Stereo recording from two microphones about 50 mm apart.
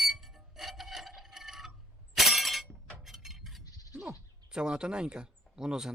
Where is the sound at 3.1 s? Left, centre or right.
Centre.